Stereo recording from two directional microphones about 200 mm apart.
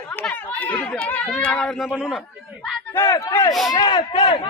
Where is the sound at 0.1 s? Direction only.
5° left (ahead or behind).